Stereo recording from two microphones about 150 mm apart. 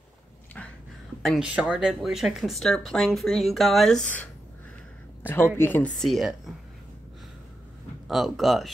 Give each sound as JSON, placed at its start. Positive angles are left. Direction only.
{"t": 0.6, "sound": "a sound", "side_deg": 10}
{"t": 1.2, "sound": "speech", "side_deg": -5}
{"t": 5.3, "sound": "a woman's voice", "side_deg": 15}
{"t": 5.9, "sound": "speech", "side_deg": 0}
{"t": 8.1, "sound": "speech", "side_deg": 0}